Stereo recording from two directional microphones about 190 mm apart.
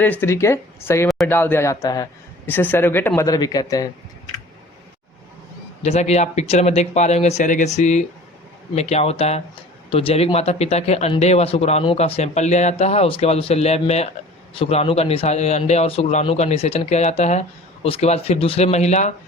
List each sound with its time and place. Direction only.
0.0 s speech: 10° left (ahead or behind)
5.8 s speech: 35° left (ahead or behind)